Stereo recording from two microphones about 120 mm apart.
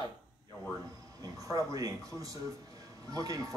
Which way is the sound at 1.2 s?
30° right (ahead or behind).